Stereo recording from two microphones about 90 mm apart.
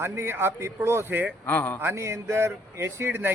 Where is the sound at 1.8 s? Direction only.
30° right (ahead or behind).